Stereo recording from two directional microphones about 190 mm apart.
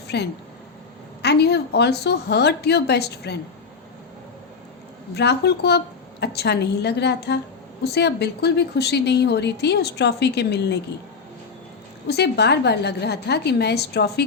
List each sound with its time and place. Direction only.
0.1 s a woman's voice: 60° left (ahead or behind)
5.1 s a woman's voice: 60° left (ahead or behind)
12.0 s a woman's voice: 60° left (ahead or behind)